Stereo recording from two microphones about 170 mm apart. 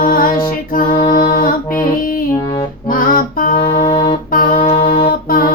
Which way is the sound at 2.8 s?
55° left (ahead or behind).